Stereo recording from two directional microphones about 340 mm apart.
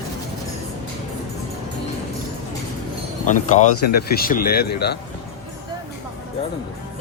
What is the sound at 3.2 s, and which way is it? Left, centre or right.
Speech, left.